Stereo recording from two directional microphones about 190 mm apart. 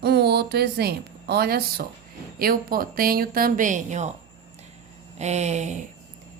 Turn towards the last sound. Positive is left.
turn(degrees=-40)  # may be behind; listen again after turning